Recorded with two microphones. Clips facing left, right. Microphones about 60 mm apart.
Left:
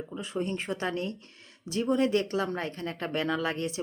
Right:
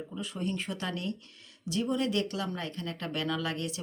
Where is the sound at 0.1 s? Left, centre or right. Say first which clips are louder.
Left 3 dB; left.